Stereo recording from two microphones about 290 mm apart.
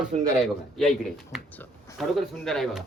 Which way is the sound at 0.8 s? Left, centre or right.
Centre.